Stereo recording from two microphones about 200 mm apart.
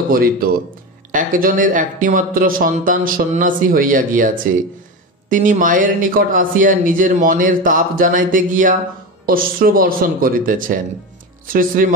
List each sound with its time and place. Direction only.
0.1 s speech: 45° right (ahead or behind)
5.3 s speech: 40° right (ahead or behind)